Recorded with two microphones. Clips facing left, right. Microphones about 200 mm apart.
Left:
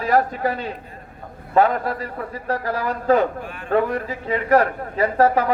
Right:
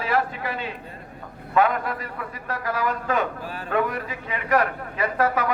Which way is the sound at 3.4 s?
35° right (ahead or behind).